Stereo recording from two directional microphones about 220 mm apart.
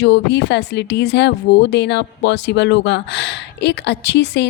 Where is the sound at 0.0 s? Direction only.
50° left (ahead or behind).